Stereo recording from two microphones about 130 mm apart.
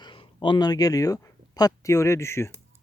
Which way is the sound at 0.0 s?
40° left (ahead or behind).